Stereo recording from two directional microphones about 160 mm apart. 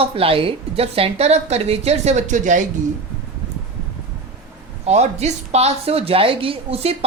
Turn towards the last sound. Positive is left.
turn(degrees=-35)  # may be behind; listen again after turning